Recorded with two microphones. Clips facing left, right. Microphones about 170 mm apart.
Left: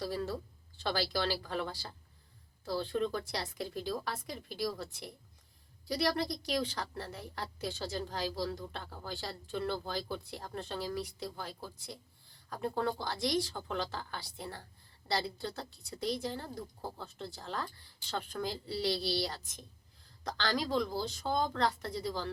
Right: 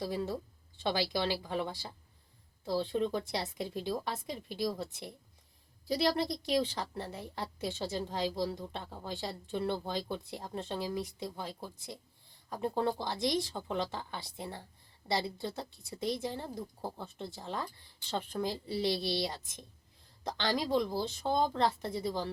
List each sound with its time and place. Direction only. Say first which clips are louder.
0.0 s speech: right 1 dB; 20° right (ahead or behind)